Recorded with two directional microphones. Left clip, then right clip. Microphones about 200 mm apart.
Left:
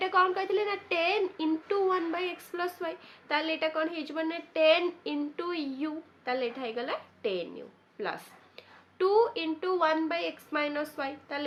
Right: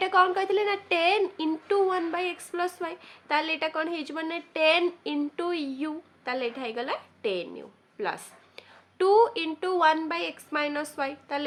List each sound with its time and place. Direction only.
0.0 s a woman's voice: 35° right (ahead or behind)